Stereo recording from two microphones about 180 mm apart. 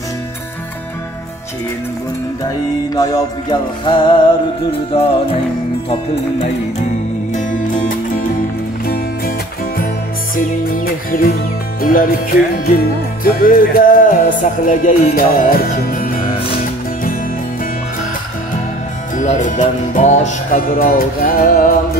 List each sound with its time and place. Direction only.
2.9 s music: 20° left (ahead or behind)
7.3 s music: 45° left (ahead or behind)
10.3 s music: 50° left (ahead or behind)
19.1 s music: 45° left (ahead or behind)